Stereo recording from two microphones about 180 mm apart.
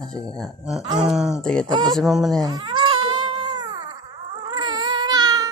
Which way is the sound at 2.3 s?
20° right (ahead or behind).